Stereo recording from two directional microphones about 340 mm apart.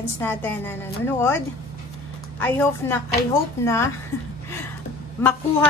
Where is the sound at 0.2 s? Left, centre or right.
Centre.